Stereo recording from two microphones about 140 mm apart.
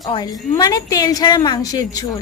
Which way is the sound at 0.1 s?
30° left (ahead or behind).